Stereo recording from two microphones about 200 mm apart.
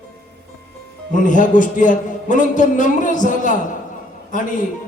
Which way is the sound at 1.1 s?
40° left (ahead or behind).